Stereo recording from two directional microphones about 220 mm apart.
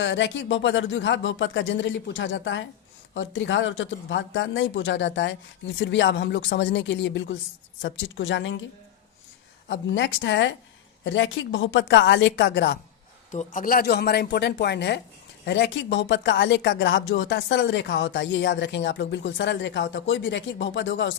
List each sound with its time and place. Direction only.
0.0 s speech: 55° left (ahead or behind)
9.6 s speech: 55° left (ahead or behind)
13.3 s speech: 35° left (ahead or behind); by 21.2 s 55° left (ahead or behind)